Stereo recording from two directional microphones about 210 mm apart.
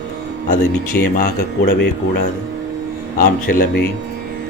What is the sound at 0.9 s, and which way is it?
Speech, 45° left (ahead or behind).